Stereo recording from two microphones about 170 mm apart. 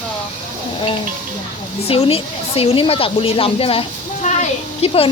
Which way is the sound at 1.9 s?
35° left (ahead or behind).